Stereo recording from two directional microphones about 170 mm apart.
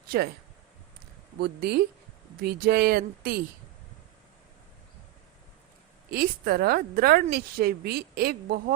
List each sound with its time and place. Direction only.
0.1 s speech: 65° right (ahead or behind)
1.4 s speech: 70° right (ahead or behind)
6.1 s speech: 65° right (ahead or behind)